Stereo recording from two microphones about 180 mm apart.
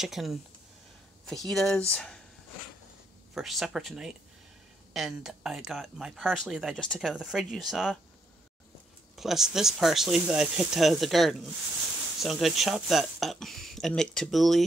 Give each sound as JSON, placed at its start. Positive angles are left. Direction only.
{"t": 0.0, "sound": "speech", "side_deg": 0}
{"t": 3.3, "sound": "speech", "side_deg": 0}
{"t": 9.1, "sound": "speech", "side_deg": 0}